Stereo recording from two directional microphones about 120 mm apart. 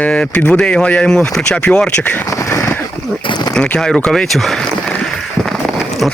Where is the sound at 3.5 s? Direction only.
5° left (ahead or behind).